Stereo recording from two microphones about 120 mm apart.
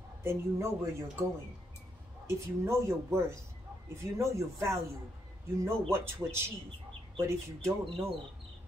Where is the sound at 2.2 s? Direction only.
20° right (ahead or behind).